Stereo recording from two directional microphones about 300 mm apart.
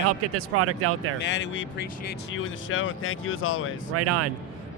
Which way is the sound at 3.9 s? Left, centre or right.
Right.